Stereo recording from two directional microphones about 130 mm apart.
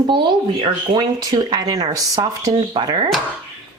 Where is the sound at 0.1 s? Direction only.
40° right (ahead or behind).